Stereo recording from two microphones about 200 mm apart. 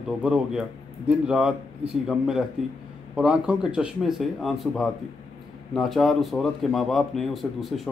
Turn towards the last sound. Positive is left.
turn(degrees=0)  # may be behind; listen again after turning